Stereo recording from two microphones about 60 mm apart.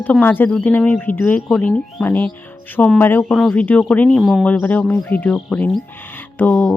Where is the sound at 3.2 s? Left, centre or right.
Centre.